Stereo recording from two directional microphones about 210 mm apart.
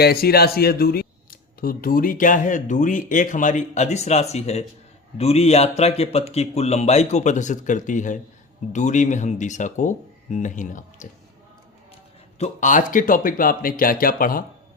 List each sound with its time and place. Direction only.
0.0 s speech: 45° left (ahead or behind)
12.4 s speech: 35° left (ahead or behind)